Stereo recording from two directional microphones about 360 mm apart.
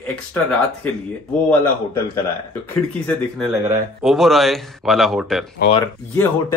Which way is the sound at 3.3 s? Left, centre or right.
Centre.